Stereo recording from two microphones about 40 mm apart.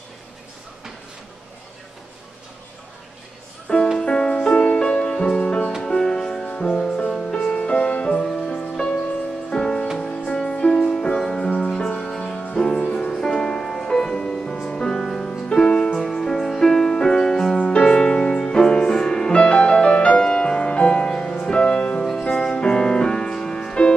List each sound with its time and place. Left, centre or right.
3.7 s music: left
4.0 s music: centre
4.6 s music: left
7.5 s music: left
9.5 s music: centre
17.6 s music: left
22.3 s music: centre